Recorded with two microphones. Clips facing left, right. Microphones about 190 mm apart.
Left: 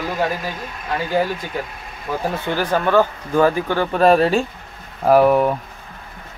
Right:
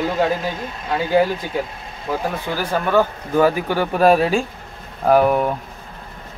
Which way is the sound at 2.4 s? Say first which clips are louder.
Left 2 dB; 5° right (ahead or behind).